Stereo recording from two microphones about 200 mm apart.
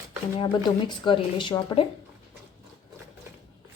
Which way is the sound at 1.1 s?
25° left (ahead or behind).